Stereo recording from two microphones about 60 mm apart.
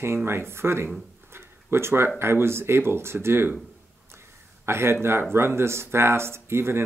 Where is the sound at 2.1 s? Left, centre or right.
Right.